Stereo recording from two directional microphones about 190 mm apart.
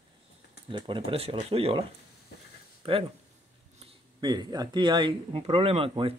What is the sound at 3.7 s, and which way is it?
Speech, 25° right (ahead or behind).